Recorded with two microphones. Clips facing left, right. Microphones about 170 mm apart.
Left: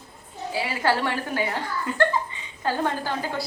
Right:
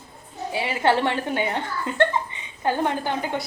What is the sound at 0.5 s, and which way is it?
Speech, 25° right (ahead or behind).